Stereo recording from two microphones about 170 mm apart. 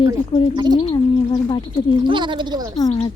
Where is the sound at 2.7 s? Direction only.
25° left (ahead or behind).